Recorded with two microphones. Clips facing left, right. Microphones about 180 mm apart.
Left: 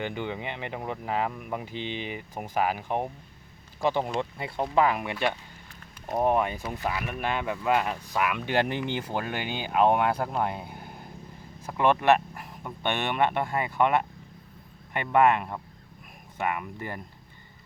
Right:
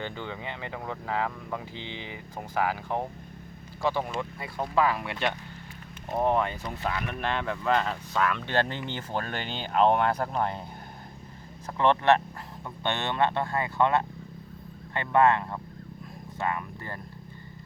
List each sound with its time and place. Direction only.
0.0 s speech: 15° left (ahead or behind)